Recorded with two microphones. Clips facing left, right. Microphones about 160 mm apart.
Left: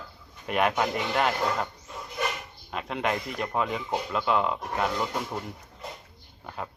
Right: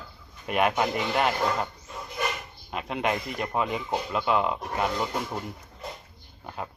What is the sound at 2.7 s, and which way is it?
Speech, 5° right (ahead or behind).